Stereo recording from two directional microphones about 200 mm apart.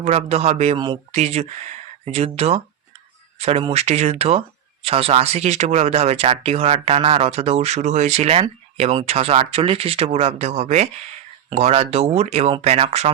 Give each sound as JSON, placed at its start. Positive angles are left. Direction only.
{"t": 0.0, "sound": "speech", "side_deg": -35}